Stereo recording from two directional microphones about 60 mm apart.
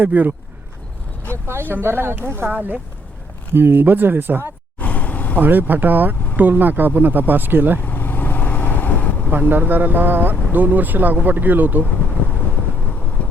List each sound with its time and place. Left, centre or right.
0.0 s speech: right
1.7 s speech: right
4.8 s a sound: left
5.4 s speech: right
7.8 s vehicle: left
9.5 s speech: right